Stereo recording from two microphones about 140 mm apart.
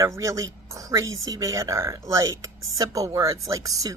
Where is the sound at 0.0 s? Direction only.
20° right (ahead or behind).